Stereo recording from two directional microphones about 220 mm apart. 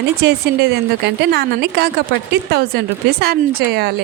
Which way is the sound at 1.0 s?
50° right (ahead or behind).